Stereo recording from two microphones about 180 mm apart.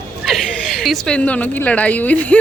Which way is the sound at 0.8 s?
Centre (ahead or behind).